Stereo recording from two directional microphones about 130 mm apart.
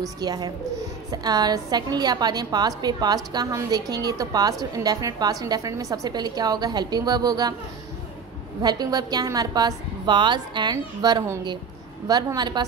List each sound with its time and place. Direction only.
0.0 s a woman's voice: 30° right (ahead or behind)
8.6 s a woman's voice: 30° right (ahead or behind)